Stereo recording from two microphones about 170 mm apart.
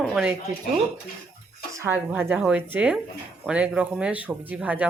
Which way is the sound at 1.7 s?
15° right (ahead or behind).